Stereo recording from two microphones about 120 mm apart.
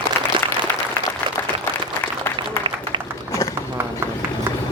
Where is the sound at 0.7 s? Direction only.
15° left (ahead or behind).